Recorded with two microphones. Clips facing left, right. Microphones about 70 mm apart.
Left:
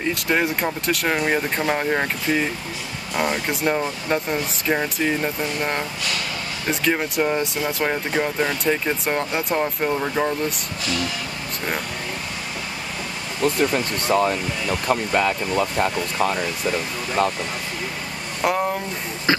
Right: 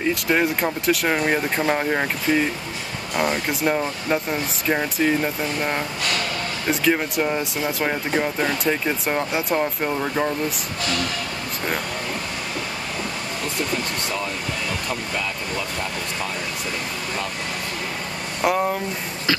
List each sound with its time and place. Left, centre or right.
0.1 s speech: centre
14.0 s speech: left
18.4 s speech: centre